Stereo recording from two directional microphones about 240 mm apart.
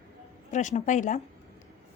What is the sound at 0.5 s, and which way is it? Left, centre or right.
Speech, left.